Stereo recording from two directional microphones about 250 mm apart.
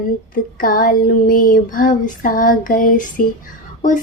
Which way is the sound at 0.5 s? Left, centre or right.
Left.